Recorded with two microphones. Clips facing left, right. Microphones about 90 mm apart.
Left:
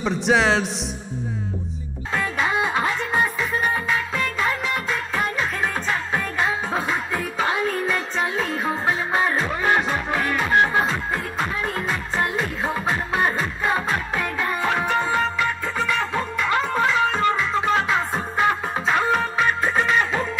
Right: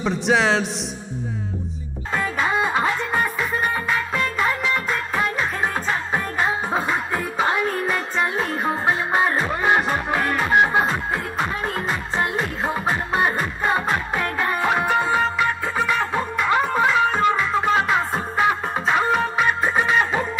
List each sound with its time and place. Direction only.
0.0 s a man's voice: centre (ahead or behind)
2.1 s music: 10° right (ahead or behind)